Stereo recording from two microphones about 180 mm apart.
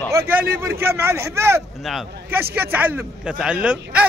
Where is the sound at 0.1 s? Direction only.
10° right (ahead or behind).